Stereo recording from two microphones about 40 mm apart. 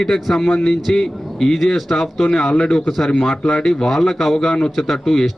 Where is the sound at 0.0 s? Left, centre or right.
Centre.